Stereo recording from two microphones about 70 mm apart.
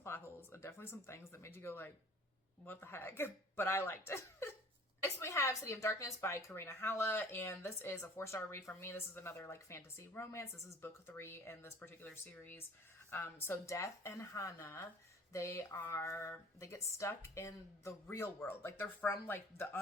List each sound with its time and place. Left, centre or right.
0.0 s a woman's voice: left
14.6 s a woman's voice: left
15.3 s a woman's voice: left